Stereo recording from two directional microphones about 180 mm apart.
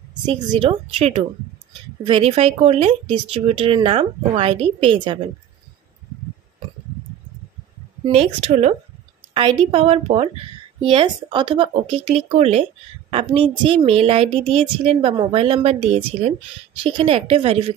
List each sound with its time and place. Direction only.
0.1 s a woman's voice: 25° right (ahead or behind)
8.1 s speech: 35° right (ahead or behind)
9.3 s speech: 25° right (ahead or behind)